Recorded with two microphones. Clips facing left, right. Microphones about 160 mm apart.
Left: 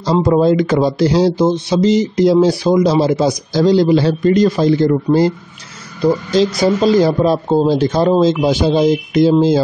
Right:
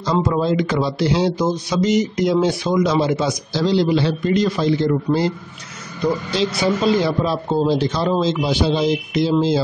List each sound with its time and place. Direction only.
0.0 s a man's voice: 35° left (ahead or behind)
6.3 s speech: 40° left (ahead or behind)